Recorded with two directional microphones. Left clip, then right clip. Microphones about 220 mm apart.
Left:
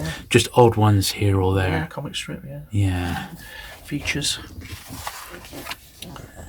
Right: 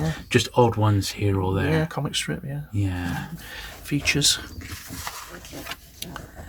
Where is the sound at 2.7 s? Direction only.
40° left (ahead or behind).